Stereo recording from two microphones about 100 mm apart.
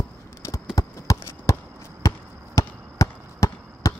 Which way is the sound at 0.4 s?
30° left (ahead or behind).